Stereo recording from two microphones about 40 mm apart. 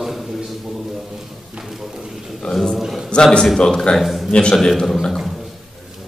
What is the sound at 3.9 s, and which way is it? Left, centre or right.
Speech, centre.